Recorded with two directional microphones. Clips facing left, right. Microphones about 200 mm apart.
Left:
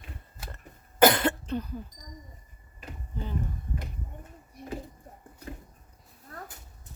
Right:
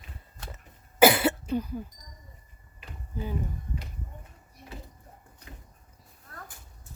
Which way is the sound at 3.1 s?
5° right (ahead or behind).